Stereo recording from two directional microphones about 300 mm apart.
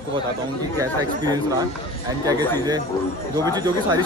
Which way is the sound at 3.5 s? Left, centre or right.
Centre.